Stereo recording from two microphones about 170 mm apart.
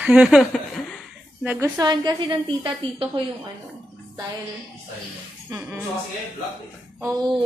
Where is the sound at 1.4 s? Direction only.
10° right (ahead or behind).